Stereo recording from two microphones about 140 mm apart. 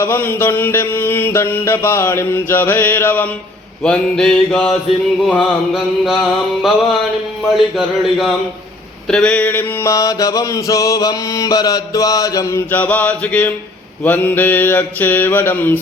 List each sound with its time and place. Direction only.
0.0 s mantra: 15° left (ahead or behind)